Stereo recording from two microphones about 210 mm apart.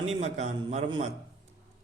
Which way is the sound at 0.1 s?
35° right (ahead or behind).